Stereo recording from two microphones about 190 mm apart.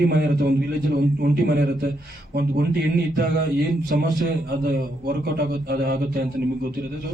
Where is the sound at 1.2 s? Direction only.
50° right (ahead or behind).